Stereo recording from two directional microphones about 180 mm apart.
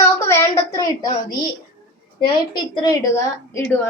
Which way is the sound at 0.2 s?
15° left (ahead or behind).